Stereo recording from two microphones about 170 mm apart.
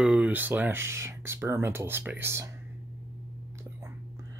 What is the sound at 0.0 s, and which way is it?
Speech, 10° right (ahead or behind).